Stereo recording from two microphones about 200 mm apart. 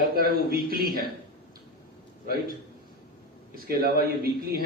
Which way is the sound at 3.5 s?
50° right (ahead or behind).